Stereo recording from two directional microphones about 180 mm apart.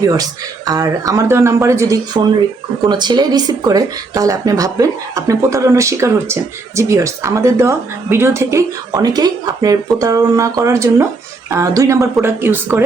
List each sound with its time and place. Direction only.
0.0 s speech: 20° right (ahead or behind)